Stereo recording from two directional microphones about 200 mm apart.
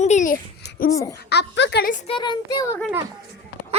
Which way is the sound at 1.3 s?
60° left (ahead or behind).